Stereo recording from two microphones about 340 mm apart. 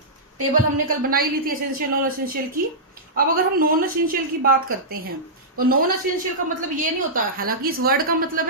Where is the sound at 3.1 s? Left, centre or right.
Right.